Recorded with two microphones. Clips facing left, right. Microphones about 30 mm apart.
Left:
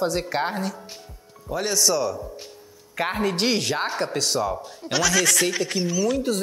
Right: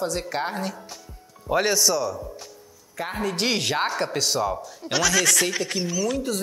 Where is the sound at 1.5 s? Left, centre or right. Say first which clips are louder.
Right 5 dB; right.